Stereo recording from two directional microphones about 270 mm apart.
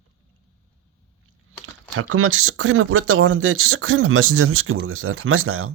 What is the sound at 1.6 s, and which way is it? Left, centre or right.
Speech, right.